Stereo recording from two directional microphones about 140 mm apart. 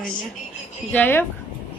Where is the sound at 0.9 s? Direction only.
15° left (ahead or behind).